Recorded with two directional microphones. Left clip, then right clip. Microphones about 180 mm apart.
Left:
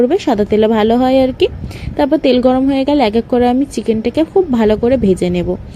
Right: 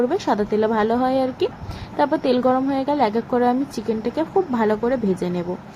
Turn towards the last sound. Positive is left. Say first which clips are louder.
# left 9 dB
turn(degrees=30)  # may be behind; listen again after turning